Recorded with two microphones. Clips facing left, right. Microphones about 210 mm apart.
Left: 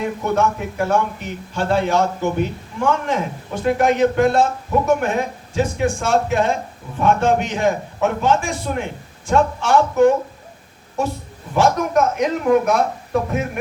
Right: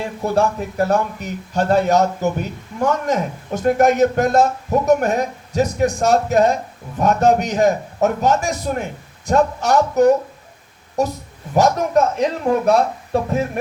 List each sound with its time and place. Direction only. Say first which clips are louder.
0.0 s a man's voice: right 1 dB; 35° right (ahead or behind)